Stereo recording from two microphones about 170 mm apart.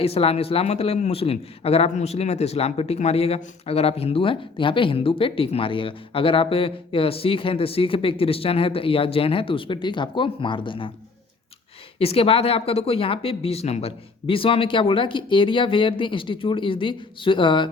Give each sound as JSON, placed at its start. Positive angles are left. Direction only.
{"t": 0.0, "sound": "a man's voice", "side_deg": 35}
{"t": 11.9, "sound": "a man's voice", "side_deg": 35}